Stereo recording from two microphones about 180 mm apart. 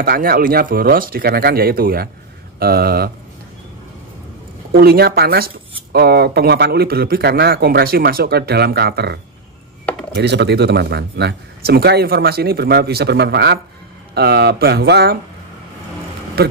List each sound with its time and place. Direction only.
0.0 s speech: 55° right (ahead or behind)
4.7 s speech: 60° right (ahead or behind)
16.4 s speech: 60° right (ahead or behind)